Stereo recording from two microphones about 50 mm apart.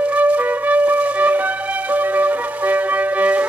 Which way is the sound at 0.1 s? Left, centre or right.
Right.